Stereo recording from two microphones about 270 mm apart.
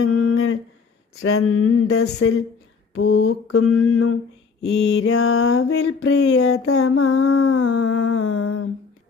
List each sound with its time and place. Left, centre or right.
0.0 s humming: left
1.2 s mantra: left